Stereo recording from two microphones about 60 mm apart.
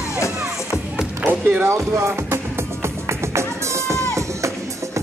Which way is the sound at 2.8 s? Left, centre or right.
Right.